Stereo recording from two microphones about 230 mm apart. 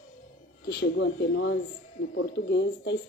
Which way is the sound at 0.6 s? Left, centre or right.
Left.